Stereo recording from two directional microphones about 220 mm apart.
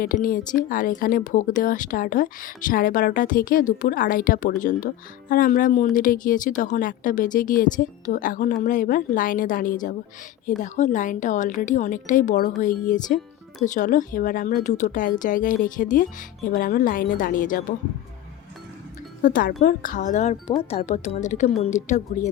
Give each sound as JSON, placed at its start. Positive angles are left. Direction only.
{"t": 0.0, "sound": "speech", "side_deg": 40}
{"t": 19.2, "sound": "speech", "side_deg": 40}